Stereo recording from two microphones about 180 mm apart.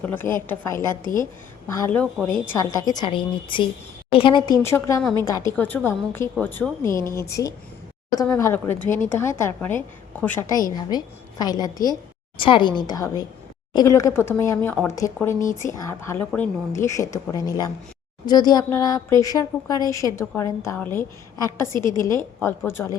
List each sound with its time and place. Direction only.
0.1 s a woman's voice: 10° left (ahead or behind)
1.0 s a woman's voice: 50° left (ahead or behind)
1.6 s a woman's voice: 15° left (ahead or behind)
4.6 s a woman's voice: 15° left (ahead or behind)
10.5 s a woman's voice: 20° left (ahead or behind)